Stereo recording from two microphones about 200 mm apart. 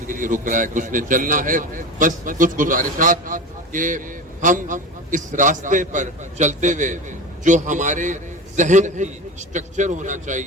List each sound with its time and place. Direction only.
0.1 s a man's voice: 40° right (ahead or behind)